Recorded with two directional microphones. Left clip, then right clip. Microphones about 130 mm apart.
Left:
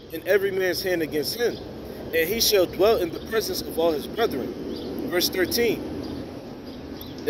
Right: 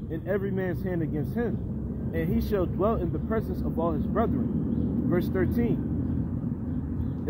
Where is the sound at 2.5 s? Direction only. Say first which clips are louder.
Left 7 dB; 10° left (ahead or behind).